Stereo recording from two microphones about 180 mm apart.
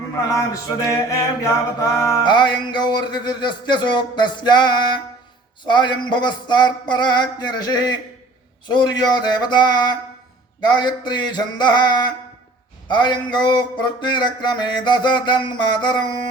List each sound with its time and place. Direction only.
0.3 s music: 15° left (ahead or behind)